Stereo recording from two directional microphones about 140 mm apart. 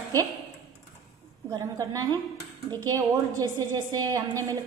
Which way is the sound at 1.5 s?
25° right (ahead or behind).